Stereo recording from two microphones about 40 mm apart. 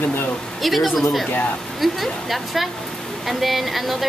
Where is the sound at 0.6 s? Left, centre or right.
Centre.